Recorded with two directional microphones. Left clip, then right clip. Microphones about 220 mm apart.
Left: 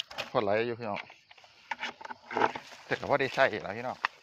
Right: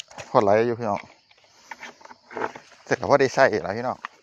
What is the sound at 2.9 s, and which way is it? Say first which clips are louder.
Speech: right 10 dB; 50° right (ahead or behind).